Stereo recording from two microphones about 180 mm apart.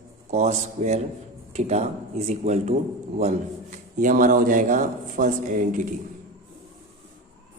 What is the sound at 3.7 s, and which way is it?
A man's voice, 45° right (ahead or behind).